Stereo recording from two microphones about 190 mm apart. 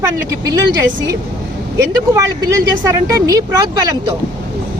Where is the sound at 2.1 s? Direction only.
20° right (ahead or behind).